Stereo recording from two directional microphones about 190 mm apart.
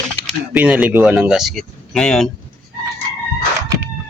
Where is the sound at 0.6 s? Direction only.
5° right (ahead or behind).